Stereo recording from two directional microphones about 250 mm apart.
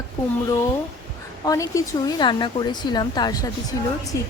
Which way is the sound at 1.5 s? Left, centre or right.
Centre.